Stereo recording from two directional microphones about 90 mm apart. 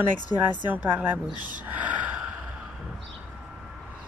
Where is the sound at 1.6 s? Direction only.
15° right (ahead or behind).